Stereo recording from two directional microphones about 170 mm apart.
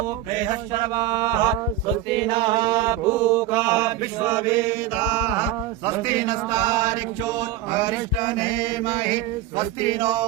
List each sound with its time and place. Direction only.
0.7 s mantra: 25° right (ahead or behind)